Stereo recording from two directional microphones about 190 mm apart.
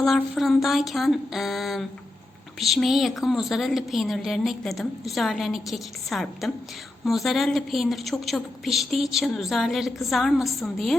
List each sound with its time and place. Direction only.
0.0 s a woman's voice: centre (ahead or behind)